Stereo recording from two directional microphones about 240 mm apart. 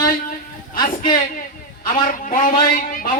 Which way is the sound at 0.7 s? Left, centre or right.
Centre.